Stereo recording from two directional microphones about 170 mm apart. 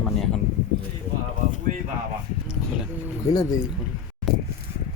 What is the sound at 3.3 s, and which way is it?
Speech, 20° left (ahead or behind).